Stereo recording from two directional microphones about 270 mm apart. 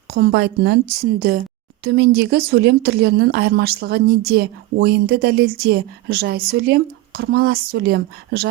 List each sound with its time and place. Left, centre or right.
0.1 s speech: right